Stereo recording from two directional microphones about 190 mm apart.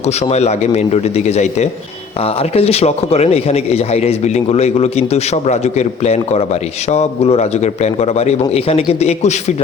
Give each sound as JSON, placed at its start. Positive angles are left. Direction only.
{"t": 0.0, "sound": "a man's voice", "side_deg": 35}